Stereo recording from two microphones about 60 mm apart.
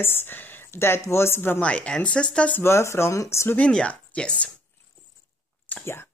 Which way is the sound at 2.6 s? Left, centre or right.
Left.